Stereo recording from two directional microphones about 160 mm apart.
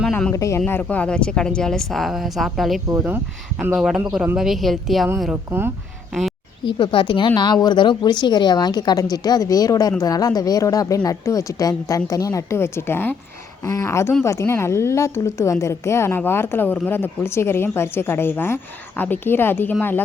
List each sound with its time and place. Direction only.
0.0 s speech: 5° left (ahead or behind)
0.3 s speech: 20° left (ahead or behind); by 2.8 s centre (ahead or behind)
2.9 s speech: 10° right (ahead or behind)
5.2 s speech: 10° right (ahead or behind)
6.7 s a woman's voice: 30° left (ahead or behind); by 19.7 s 15° left (ahead or behind)